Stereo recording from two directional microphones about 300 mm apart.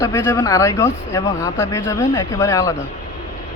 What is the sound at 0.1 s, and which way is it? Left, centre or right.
Speech, centre.